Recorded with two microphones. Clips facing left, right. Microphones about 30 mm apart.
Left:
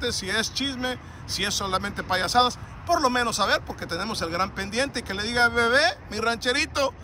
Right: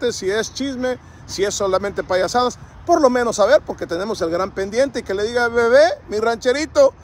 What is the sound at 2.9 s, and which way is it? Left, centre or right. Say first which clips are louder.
Speech: right 8 dB; left.